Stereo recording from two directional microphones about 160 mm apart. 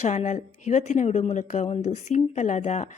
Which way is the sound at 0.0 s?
45° left (ahead or behind).